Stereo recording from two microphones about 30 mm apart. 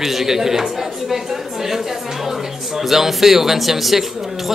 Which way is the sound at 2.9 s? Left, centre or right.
Centre.